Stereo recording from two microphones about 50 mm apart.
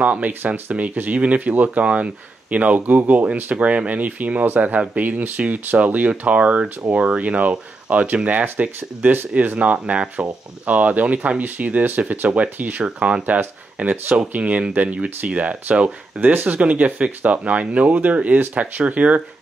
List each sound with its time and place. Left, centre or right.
0.0 s speech: right
16.2 s speech: right